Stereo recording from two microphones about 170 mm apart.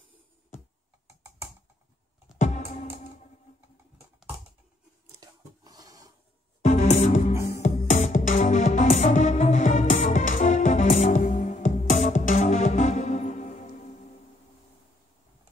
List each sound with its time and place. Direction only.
2.4 s music: 45° left (ahead or behind)
5.2 s a sound: 20° right (ahead or behind)
6.6 s music: 40° left (ahead or behind)